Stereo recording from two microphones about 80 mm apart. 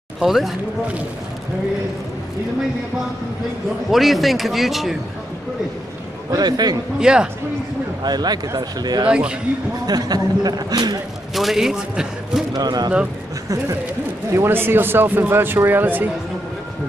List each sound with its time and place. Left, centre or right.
0.2 s a man's voice: centre
3.9 s a man's voice: centre
6.3 s a man's voice: right
7.0 s speech: centre
8.0 s a man's voice: right
9.1 s speech: centre
9.8 s a man's voice: right
11.3 s a man's voice: centre
12.5 s a man's voice: right
14.3 s a man's voice: right